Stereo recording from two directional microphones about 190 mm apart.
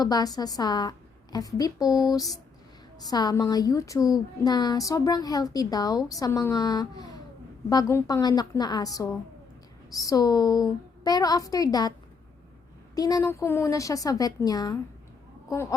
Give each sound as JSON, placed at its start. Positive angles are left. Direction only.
{"t": 0.0, "sound": "a woman's voice", "side_deg": 20}
{"t": 13.0, "sound": "a woman's voice", "side_deg": 20}